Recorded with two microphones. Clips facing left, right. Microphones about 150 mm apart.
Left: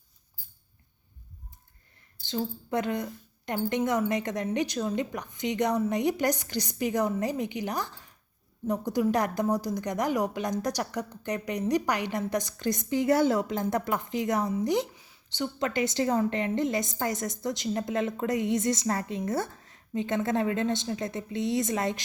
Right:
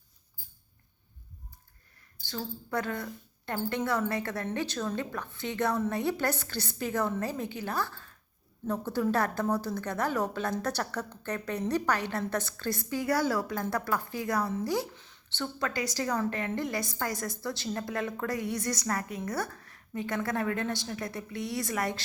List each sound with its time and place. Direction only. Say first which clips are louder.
2.2 s a woman's voice: left 6 dB; 20° left (ahead or behind)